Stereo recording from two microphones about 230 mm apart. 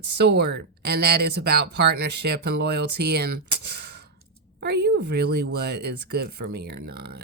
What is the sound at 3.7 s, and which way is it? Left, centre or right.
Sigh, right.